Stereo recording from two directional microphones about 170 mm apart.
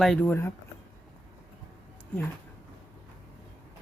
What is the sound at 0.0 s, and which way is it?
Speech, 5° left (ahead or behind).